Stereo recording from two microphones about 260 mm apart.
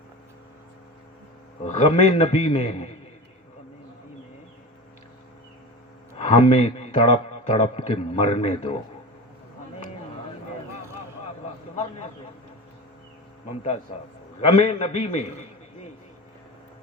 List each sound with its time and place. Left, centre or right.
1.6 s a man's voice: left
6.1 s a man's voice: left
11.8 s a man's voice: left
14.6 s a man's voice: left